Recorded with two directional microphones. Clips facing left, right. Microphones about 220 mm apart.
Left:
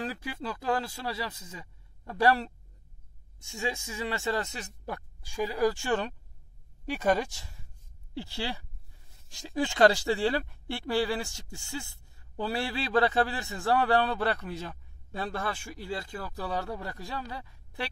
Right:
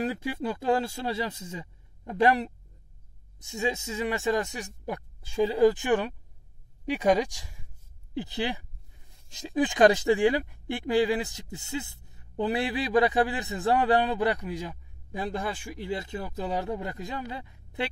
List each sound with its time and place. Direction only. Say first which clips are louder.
0.0 s speech: right 6 dB; 25° right (ahead or behind)